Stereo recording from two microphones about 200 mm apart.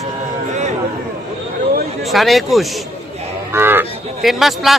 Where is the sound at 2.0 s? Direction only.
Centre (ahead or behind).